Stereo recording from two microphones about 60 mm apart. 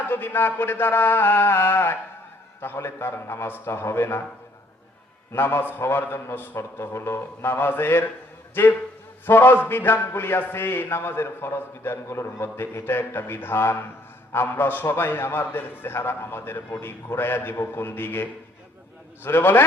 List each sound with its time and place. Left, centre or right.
0.1 s a man's voice: left
5.3 s a man's voice: left